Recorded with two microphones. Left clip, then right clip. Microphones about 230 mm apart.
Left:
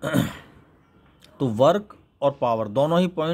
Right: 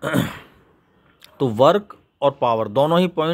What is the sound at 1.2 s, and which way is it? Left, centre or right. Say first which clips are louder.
A man's voice: right 4 dB; centre.